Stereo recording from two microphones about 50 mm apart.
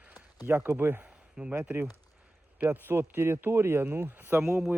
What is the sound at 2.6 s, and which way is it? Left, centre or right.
Speech, right.